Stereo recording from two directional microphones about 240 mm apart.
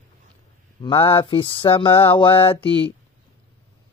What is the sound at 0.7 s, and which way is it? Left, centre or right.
Mantra, left.